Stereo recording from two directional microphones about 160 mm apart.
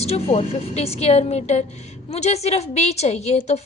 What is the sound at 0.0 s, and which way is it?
A woman's voice, 40° left (ahead or behind).